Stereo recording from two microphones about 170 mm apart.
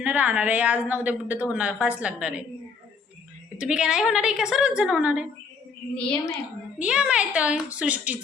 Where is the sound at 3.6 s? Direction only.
5° right (ahead or behind).